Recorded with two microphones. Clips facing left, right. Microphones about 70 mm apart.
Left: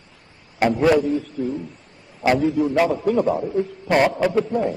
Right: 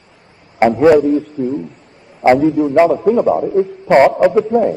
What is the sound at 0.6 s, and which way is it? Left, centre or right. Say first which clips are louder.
Speech: right 7 dB; right.